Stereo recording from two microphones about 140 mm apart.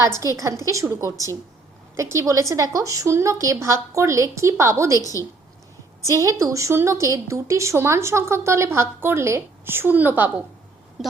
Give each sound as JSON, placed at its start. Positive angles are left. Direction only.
{"t": 0.2, "sound": "a woman's voice", "side_deg": -20}
{"t": 4.9, "sound": "a woman's voice", "side_deg": 25}
{"t": 6.1, "sound": "a woman's voice", "side_deg": -20}